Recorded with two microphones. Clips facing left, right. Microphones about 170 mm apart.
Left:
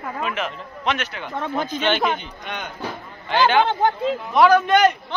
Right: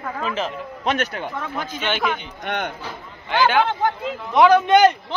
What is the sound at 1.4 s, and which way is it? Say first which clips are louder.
Speech: left 4 dB; 25° left (ahead or behind).